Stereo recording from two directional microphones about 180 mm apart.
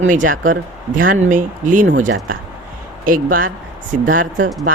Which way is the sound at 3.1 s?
50° right (ahead or behind).